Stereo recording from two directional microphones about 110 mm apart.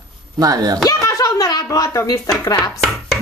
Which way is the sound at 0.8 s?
30° left (ahead or behind).